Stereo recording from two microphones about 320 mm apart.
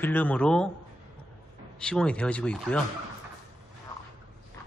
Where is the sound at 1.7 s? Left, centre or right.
Centre.